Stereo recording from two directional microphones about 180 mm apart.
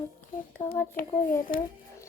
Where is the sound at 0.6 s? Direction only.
50° left (ahead or behind).